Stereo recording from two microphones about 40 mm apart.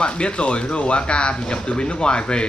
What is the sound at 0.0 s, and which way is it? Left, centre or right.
Speech, left.